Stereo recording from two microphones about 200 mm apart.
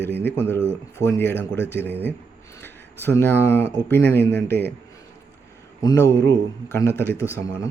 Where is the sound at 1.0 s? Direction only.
10° left (ahead or behind).